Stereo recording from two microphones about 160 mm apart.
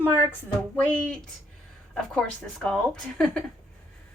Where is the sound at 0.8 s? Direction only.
10° left (ahead or behind).